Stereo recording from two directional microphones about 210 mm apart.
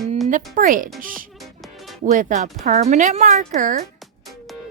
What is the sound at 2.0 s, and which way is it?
Speech, 40° right (ahead or behind).